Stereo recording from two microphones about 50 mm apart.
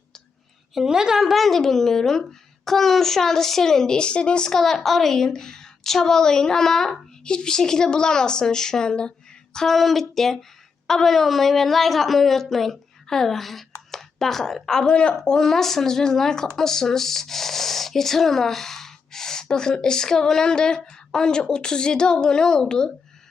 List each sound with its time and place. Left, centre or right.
0.7 s a woman's voice: centre
9.6 s a woman's voice: centre